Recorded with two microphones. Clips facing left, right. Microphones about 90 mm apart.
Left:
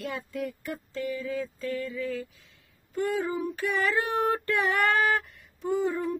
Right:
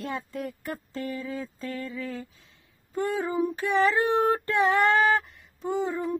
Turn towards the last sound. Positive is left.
turn(degrees=-20)  # may be behind; listen again after turning